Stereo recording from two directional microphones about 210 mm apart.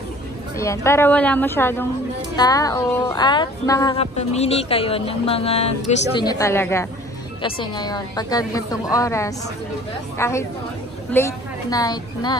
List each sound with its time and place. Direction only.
0.6 s a woman's voice: 15° left (ahead or behind); by 5.9 s 30° left (ahead or behind)
6.1 s a woman's voice: 15° left (ahead or behind)